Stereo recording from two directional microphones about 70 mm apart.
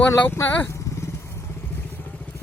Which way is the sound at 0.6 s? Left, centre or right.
Left.